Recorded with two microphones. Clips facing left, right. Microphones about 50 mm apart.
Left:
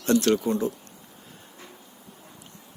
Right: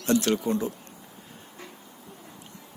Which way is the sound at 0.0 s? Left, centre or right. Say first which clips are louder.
Left 2 dB; centre.